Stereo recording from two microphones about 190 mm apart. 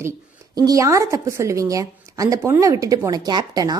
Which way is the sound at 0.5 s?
20° right (ahead or behind).